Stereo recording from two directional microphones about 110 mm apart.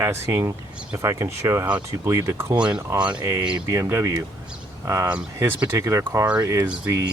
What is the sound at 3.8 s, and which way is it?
Speech, 30° right (ahead or behind).